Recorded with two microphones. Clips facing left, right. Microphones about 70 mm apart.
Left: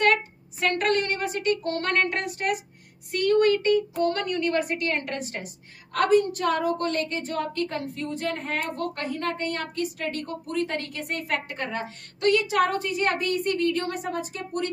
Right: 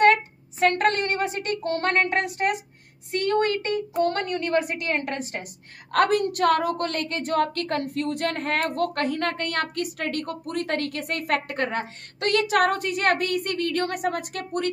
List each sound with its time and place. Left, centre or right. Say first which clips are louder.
0.0 s a woman's voice: right 4 dB; right
4.9 s speech: right 2 dB; right
5.4 s a woman's voice: even; right
12.3 s a woman's voice: right 1 dB; right